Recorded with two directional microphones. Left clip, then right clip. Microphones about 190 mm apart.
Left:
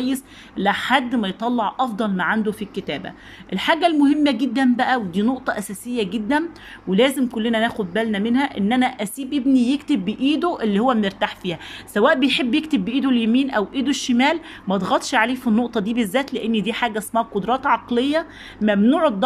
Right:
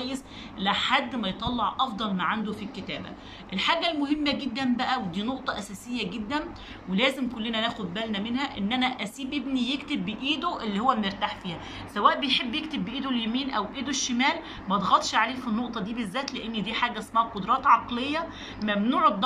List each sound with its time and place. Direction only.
0.0 s speech: 45° left (ahead or behind)